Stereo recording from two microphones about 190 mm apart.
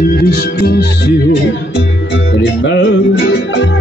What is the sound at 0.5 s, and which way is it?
Music, 55° left (ahead or behind).